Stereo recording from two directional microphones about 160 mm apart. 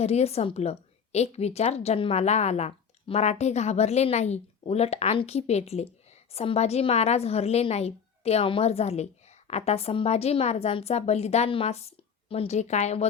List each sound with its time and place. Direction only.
0.0 s a woman's voice: 40° left (ahead or behind)